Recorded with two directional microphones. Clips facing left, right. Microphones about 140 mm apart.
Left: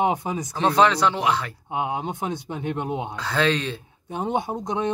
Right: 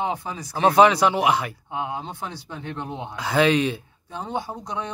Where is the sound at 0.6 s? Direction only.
10° right (ahead or behind).